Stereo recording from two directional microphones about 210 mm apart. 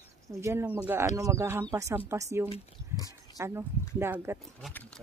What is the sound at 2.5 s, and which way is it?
Speech, 15° left (ahead or behind).